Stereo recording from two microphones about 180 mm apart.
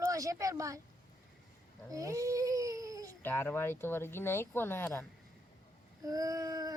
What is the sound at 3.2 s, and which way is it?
Speech, 10° left (ahead or behind).